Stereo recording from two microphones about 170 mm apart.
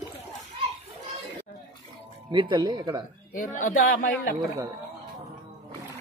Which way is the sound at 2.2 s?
30° right (ahead or behind).